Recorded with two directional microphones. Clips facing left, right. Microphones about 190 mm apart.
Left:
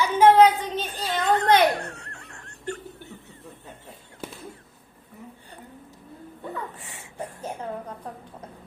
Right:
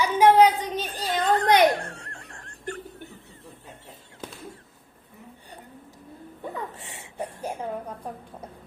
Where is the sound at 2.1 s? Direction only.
35° right (ahead or behind).